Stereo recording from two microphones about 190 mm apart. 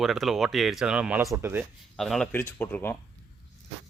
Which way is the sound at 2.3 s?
15° left (ahead or behind).